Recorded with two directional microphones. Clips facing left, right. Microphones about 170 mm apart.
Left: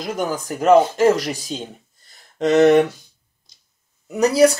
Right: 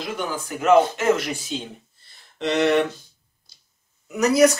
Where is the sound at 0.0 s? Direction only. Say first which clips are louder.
Left 4 dB; 40° left (ahead or behind).